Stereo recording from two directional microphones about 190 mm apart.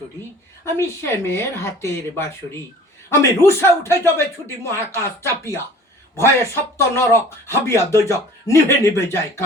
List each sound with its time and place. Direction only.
0.6 s speech: 15° left (ahead or behind)